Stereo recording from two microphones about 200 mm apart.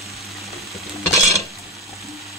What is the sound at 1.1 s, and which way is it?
Dishes, 15° left (ahead or behind).